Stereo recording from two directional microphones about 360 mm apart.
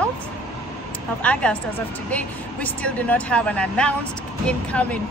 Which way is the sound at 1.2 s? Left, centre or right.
Centre.